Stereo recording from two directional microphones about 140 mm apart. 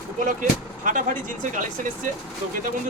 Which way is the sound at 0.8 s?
70° right (ahead or behind).